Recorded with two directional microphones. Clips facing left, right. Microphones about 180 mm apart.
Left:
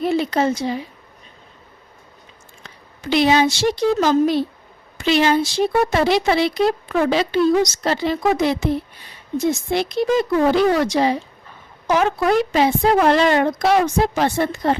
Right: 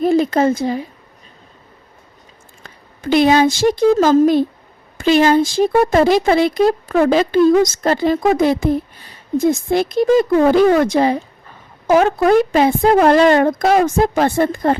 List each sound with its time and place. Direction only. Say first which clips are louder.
0.0 s a woman's voice: right 5 dB; 45° right (ahead or behind)
2.6 s a woman's voice: right 5 dB; 50° right (ahead or behind)